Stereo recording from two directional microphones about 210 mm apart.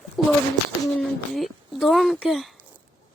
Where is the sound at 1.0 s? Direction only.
Centre (ahead or behind).